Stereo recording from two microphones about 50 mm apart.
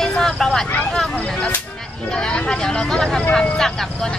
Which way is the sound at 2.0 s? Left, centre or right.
Centre.